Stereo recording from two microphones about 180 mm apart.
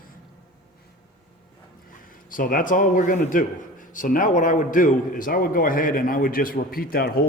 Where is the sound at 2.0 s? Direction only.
50° left (ahead or behind).